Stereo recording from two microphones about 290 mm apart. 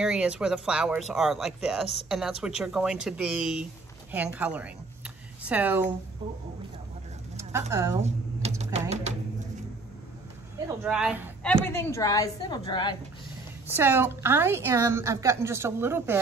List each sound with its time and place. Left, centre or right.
0.0 s a woman's voice: centre
7.7 s a woman's voice: centre
8.0 s typing: right
8.7 s a sound: right
10.8 s a woman's voice: centre
13.7 s a woman's voice: centre